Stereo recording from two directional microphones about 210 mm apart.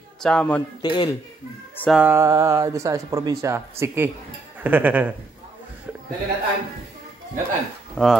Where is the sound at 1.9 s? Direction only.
10° right (ahead or behind).